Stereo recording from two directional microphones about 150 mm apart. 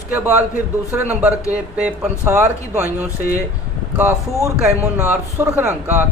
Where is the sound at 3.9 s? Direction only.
15° right (ahead or behind).